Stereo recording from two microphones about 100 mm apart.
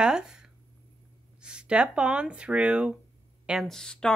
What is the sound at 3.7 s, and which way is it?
Speech, 5° left (ahead or behind).